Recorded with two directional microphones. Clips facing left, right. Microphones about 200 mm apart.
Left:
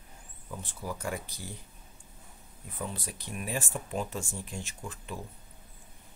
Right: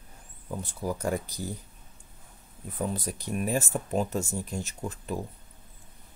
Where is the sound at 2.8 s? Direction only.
40° right (ahead or behind).